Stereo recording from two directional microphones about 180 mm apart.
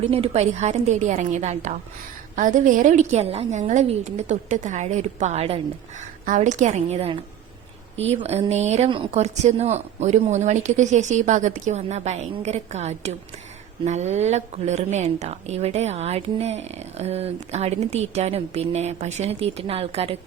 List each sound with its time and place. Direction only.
0.1 s a woman's voice: 35° right (ahead or behind)